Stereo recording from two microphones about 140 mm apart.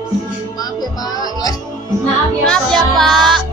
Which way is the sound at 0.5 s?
25° left (ahead or behind).